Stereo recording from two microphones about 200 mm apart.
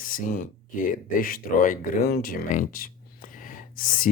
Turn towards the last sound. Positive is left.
turn(degrees=45)  # may be behind; listen again after turning